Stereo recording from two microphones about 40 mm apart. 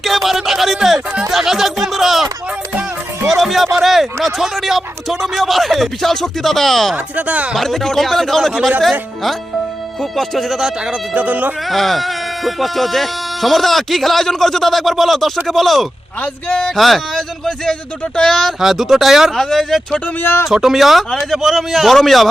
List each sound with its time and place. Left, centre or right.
0.0 s music: centre
1.3 s a sound: centre
3.2 s speech: centre
6.9 s speech: right
7.5 s speech: centre
10.0 s speech: centre
11.1 s speech: right
11.7 s speech: centre
18.6 s speech: centre
19.4 s speech: centre
20.5 s speech: centre